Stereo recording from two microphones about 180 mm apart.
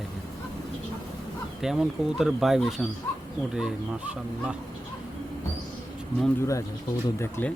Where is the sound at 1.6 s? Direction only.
5° right (ahead or behind).